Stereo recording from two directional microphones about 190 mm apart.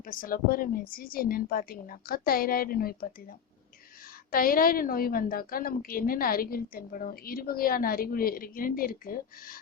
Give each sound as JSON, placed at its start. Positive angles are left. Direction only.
{"t": 0.0, "sound": "a woman's voice", "side_deg": 45}